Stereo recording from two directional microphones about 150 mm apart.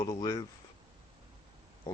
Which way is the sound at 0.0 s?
20° left (ahead or behind).